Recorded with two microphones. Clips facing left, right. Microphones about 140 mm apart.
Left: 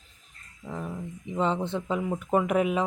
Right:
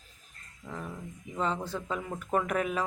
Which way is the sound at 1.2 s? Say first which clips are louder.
Left 5 dB; 25° left (ahead or behind).